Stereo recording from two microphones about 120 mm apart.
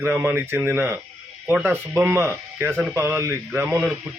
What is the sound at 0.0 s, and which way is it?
A man's voice, 15° right (ahead or behind).